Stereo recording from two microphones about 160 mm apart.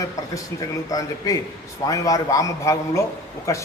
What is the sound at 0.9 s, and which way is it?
A man's voice, 20° left (ahead or behind).